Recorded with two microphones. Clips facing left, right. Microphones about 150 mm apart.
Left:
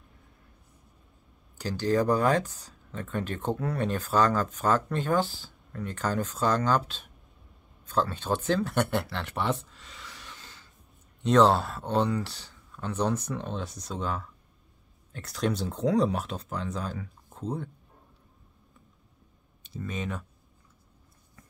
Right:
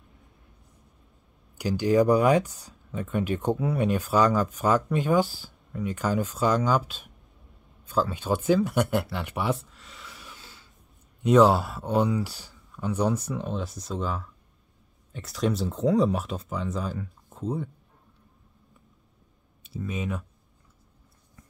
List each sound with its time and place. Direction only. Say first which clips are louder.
1.6 s speech: right 4 dB; 10° right (ahead or behind)
19.6 s speech: right 2 dB; 5° right (ahead or behind)